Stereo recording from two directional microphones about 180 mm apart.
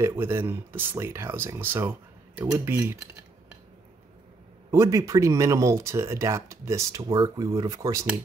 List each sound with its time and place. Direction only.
0.0 s speech: 15° right (ahead or behind)
4.6 s speech: 15° right (ahead or behind)